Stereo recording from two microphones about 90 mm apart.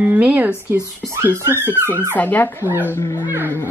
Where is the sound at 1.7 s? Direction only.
25° left (ahead or behind).